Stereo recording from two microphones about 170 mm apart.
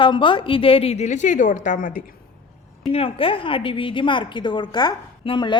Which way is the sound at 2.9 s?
35° left (ahead or behind).